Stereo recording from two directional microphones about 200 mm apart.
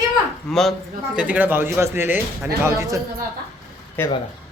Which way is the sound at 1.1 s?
5° right (ahead or behind).